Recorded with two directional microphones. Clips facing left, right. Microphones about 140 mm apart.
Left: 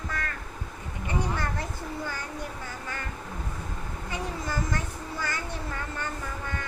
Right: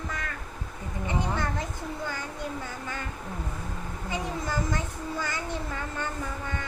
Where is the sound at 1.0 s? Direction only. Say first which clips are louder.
Right 1 dB; 20° right (ahead or behind).